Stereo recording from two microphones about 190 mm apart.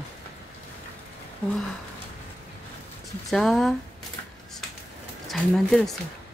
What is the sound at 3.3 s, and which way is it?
Speech, centre (ahead or behind).